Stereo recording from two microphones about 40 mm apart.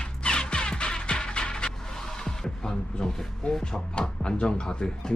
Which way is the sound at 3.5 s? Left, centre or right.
Centre.